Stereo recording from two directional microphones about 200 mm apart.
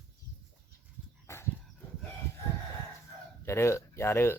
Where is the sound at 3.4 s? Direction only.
15° left (ahead or behind).